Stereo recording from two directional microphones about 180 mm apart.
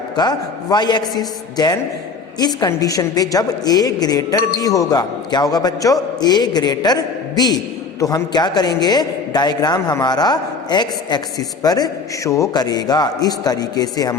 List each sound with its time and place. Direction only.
0.2 s a woman's voice: 25° left (ahead or behind)